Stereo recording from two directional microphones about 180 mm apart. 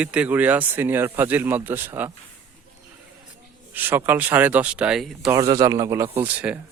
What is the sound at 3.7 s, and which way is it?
Speech, 10° right (ahead or behind).